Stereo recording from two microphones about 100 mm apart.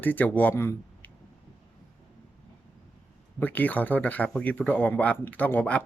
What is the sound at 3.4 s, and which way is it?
Speech, 15° left (ahead or behind).